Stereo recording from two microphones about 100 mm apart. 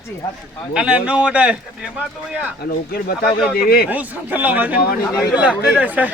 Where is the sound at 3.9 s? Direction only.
15° right (ahead or behind).